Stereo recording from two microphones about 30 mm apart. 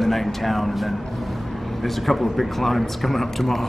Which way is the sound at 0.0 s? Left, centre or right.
Centre.